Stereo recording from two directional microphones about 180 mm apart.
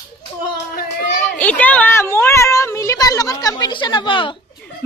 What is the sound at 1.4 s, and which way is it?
Speech, 10° left (ahead or behind).